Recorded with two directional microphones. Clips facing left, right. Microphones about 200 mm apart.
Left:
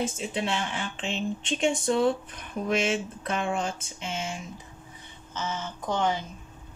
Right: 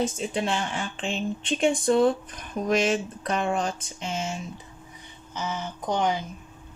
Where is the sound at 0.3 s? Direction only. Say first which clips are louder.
Right 2 dB; 45° right (ahead or behind).